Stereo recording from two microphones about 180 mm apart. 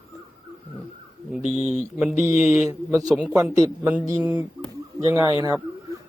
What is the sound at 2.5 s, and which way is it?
Speech, 15° right (ahead or behind).